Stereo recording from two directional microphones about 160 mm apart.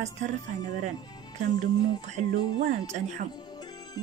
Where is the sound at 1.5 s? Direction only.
25° left (ahead or behind).